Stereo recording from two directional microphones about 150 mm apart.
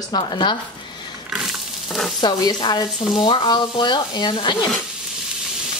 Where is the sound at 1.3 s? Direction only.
Centre (ahead or behind).